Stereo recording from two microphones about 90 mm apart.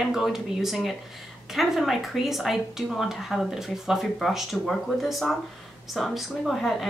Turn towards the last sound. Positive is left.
turn(degrees=0)  # may be behind; listen again after turning